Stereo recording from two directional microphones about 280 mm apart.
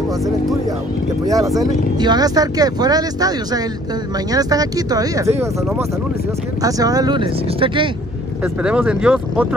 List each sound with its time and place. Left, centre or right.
1.2 s speech: centre
8.6 s speech: centre